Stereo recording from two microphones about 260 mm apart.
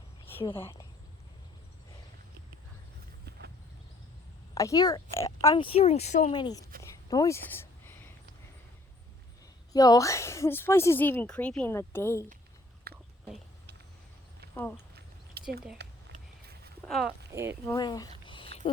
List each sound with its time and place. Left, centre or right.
0.4 s a woman's voice: centre
3.2 s horse: right
4.5 s a woman's voice: centre
6.8 s a sound: centre
9.7 s a woman's voice: centre
12.9 s whispering: right
14.5 s speech: centre
14.9 s a sound: right
16.1 s vehicle: right
16.8 s speech: centre
17.7 s a woman's voice: centre
18.3 s a sound: centre